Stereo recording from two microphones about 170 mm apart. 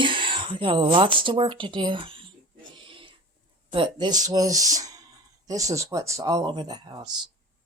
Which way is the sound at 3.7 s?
30° right (ahead or behind).